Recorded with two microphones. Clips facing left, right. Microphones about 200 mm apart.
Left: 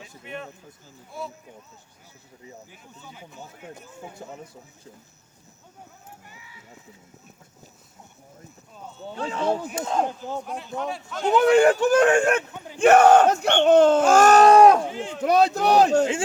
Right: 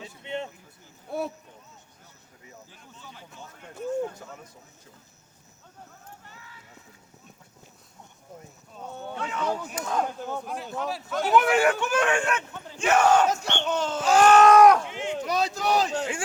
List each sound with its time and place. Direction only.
0.0 s a sound: 25° right (ahead or behind)
1.1 s speech: 65° right (ahead or behind)
3.0 s speech: 10° left (ahead or behind)
6.2 s a sound: 10° left (ahead or behind)
9.1 s speech: 30° left (ahead or behind)
10.4 s a man's voice: centre (ahead or behind)
11.3 s speech: 30° left (ahead or behind)
12.5 s battle cry: 15° left (ahead or behind)
12.8 s battle cry: 60° left (ahead or behind); by 15.1 s 35° left (ahead or behind)
15.2 s battle cry: 55° left (ahead or behind)